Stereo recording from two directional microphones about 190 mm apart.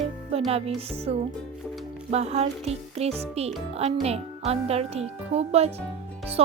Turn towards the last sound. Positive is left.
turn(degrees=-30)  # may be behind; listen again after turning